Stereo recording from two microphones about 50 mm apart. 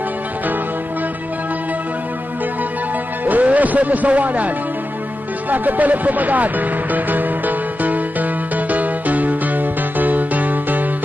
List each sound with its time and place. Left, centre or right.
3.3 s speech: right
5.5 s music: right